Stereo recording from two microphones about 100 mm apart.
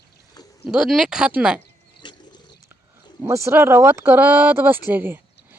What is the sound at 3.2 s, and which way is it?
Speech, 30° right (ahead or behind).